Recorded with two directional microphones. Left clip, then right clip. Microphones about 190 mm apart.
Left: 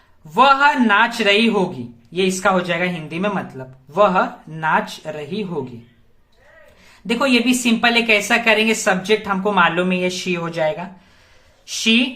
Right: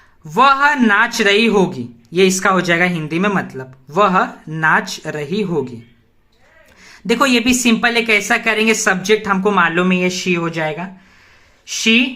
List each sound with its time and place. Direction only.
0.3 s a man's voice: 20° right (ahead or behind)
7.1 s a man's voice: 20° right (ahead or behind)